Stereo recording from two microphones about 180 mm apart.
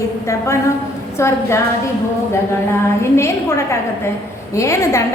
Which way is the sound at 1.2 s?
15° left (ahead or behind).